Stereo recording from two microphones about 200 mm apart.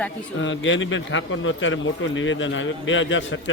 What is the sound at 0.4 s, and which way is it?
A man's voice, 70° left (ahead or behind).